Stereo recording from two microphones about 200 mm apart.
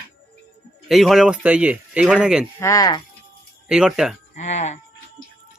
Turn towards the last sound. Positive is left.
turn(degrees=35)  # may be behind; listen again after turning